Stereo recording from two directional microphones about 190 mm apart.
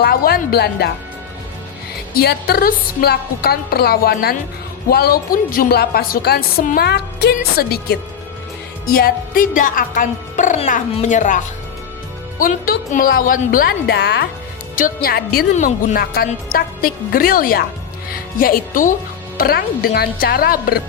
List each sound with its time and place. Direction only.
0.0 s speech: 55° left (ahead or behind)
2.1 s a woman's voice: 55° left (ahead or behind)
14.8 s a woman's voice: 50° left (ahead or behind)